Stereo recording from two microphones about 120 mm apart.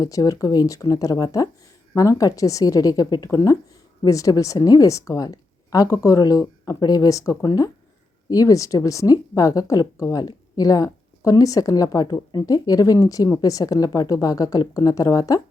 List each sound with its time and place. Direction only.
0.0 s a woman's voice: 30° left (ahead or behind)